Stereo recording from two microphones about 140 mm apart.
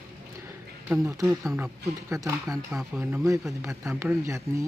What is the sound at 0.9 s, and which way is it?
Speech, 15° right (ahead or behind).